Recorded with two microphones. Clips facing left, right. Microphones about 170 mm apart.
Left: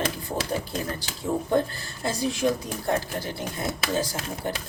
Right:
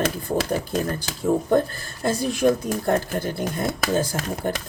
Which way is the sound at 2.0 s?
55° right (ahead or behind).